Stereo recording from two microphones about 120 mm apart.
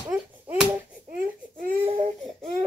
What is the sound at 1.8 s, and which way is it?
Baby cry, 55° right (ahead or behind).